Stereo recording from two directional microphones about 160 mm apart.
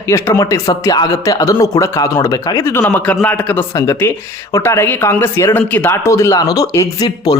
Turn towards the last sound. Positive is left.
turn(degrees=25)  # may be behind; listen again after turning